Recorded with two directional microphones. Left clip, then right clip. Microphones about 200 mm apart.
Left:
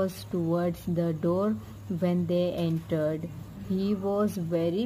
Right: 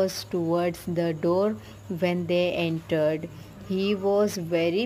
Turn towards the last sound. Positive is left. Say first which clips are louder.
# right 4 dB
turn(degrees=-25)  # may be behind; listen again after turning